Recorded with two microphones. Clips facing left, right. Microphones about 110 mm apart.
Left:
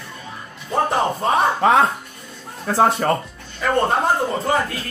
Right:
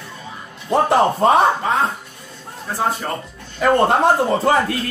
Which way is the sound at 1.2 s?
70° right (ahead or behind).